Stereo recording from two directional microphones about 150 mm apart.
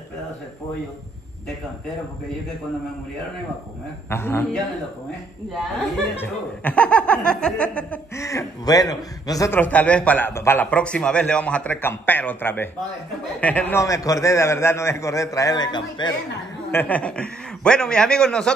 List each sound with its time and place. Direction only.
4.1 s a man's voice: 15° left (ahead or behind)
6.1 s a man's voice: 10° left (ahead or behind)
8.2 s a man's voice: 20° left (ahead or behind)
16.7 s a man's voice: 10° left (ahead or behind)